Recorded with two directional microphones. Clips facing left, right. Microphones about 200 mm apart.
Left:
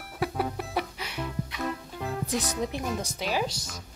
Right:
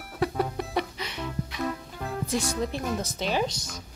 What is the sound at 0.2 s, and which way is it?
Music, 5° left (ahead or behind).